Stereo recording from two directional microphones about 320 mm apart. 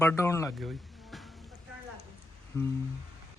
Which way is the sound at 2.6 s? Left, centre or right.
Centre.